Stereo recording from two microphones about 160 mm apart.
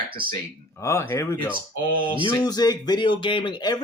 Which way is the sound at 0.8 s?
15° left (ahead or behind).